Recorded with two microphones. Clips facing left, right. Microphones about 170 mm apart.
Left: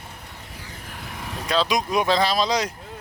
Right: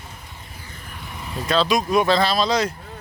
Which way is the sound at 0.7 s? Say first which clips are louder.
Even; 80° left.